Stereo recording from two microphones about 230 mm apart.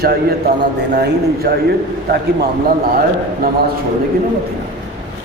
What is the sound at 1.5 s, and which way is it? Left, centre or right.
Speech, right.